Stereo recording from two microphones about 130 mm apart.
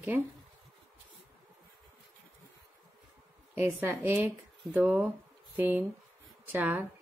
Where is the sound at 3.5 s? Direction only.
20° right (ahead or behind).